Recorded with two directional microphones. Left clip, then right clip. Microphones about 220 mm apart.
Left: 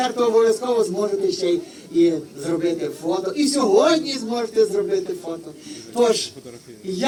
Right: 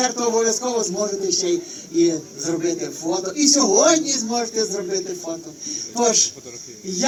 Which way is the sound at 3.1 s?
50° right (ahead or behind).